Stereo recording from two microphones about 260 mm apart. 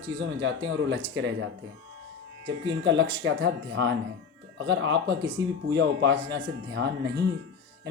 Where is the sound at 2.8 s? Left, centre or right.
Right.